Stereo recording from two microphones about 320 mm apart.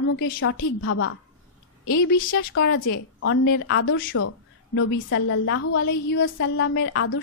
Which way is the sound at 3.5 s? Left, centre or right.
Left.